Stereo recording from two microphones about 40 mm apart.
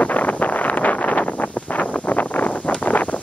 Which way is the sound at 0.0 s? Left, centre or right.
Left.